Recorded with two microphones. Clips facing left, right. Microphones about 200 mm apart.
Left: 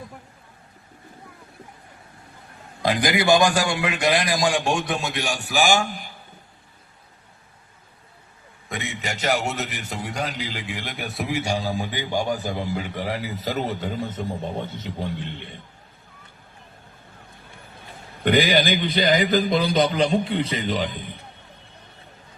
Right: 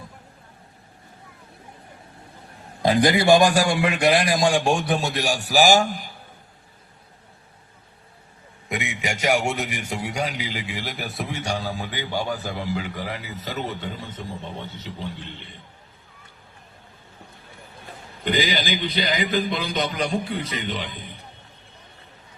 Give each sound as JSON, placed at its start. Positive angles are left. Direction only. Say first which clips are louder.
{"t": 3.0, "sound": "a man's voice", "louder": "right 2 dB", "side_deg": -30}
{"t": 8.7, "sound": "a sound", "louder": "right 2 dB", "side_deg": -15}
{"t": 9.6, "sound": "a man's voice", "louder": "right 2 dB", "side_deg": -10}
{"t": 14.8, "sound": "a man's voice", "louder": "left 4 dB", "side_deg": 55}
{"t": 18.2, "sound": "a man's voice", "louder": "left 5 dB", "side_deg": 60}